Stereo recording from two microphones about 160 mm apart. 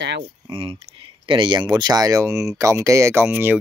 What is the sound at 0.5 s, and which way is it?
Speech, 35° right (ahead or behind).